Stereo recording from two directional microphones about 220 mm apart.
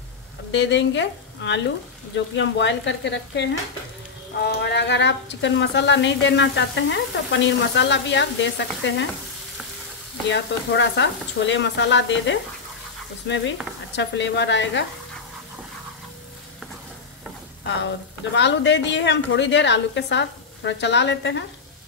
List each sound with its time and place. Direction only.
0.5 s a woman's voice: 55° left (ahead or behind)
2.1 s stir: 55° left (ahead or behind)
4.4 s a woman's voice: 50° left (ahead or behind)
10.2 s stir: 55° left (ahead or behind)
13.9 s stir: 55° left (ahead or behind)
18.3 s a woman's voice: 55° left (ahead or behind)